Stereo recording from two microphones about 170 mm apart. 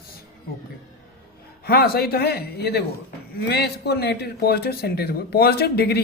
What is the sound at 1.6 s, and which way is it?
A man's voice, 65° left (ahead or behind).